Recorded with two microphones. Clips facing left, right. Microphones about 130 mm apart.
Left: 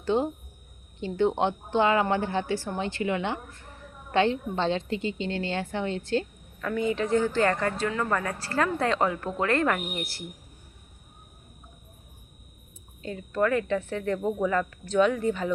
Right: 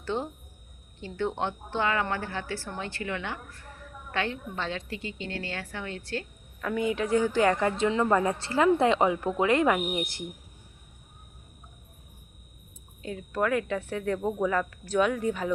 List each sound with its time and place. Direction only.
0.0 s a woman's voice: 15° left (ahead or behind)
6.6 s speech: 5° right (ahead or behind)
13.0 s speech: 5° right (ahead or behind)